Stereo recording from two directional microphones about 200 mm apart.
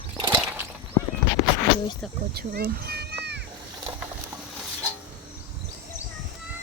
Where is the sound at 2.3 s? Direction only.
50° right (ahead or behind).